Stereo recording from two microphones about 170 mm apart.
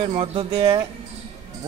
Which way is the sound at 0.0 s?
35° right (ahead or behind).